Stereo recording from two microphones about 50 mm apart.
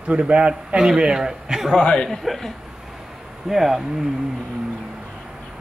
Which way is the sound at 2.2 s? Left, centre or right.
Centre.